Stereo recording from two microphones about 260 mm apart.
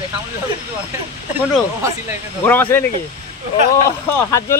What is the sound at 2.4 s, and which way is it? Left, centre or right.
Speech, centre.